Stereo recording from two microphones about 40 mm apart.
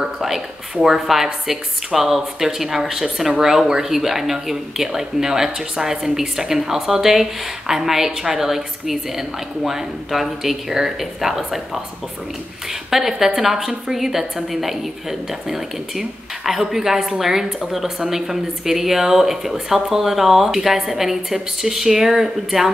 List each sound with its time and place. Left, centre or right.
0.0 s a woman's voice: centre
12.9 s a woman's voice: centre